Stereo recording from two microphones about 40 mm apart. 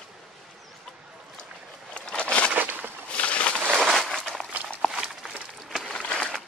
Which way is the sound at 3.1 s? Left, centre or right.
Left.